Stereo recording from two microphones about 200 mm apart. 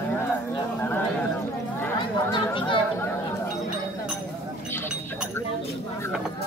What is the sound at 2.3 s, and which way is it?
Speech, 25° left (ahead or behind).